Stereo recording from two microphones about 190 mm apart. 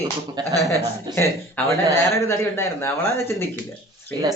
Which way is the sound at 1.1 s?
15° left (ahead or behind).